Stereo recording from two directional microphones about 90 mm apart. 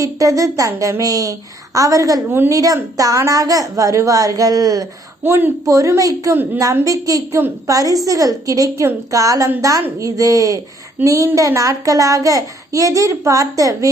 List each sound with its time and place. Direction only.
0.0 s a child's voice: 40° right (ahead or behind)
5.2 s a child's voice: 25° right (ahead or behind)
6.3 s a woman's voice: 20° right (ahead or behind)
6.8 s a child's voice: 40° right (ahead or behind)